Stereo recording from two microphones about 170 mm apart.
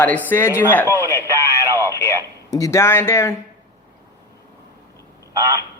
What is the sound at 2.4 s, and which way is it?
Speech, 20° left (ahead or behind).